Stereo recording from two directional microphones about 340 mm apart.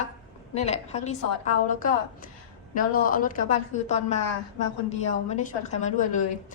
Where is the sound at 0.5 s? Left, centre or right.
Centre.